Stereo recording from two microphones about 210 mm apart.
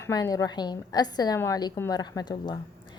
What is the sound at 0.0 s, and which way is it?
A woman's voice, 15° left (ahead or behind).